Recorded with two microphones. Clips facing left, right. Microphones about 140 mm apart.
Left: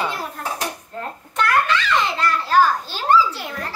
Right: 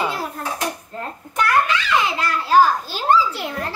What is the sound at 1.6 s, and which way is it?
A child's voice, 5° right (ahead or behind).